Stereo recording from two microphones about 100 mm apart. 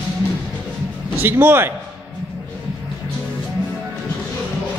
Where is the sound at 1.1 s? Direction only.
20° right (ahead or behind).